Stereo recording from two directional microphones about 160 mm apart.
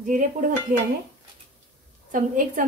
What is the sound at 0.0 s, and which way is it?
Speech, 50° right (ahead or behind).